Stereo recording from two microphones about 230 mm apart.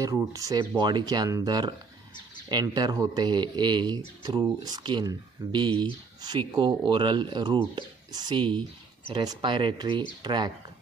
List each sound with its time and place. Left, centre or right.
0.0 s speech: centre